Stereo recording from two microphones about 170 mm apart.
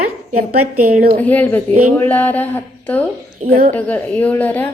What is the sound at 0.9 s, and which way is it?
Speech, 50° right (ahead or behind).